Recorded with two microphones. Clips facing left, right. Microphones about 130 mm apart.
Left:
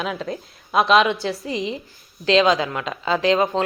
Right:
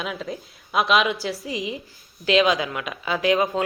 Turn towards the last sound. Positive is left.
turn(degrees=30)  # may be behind; listen again after turning